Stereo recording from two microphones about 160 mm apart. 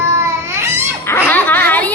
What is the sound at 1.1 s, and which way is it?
Music, 10° left (ahead or behind).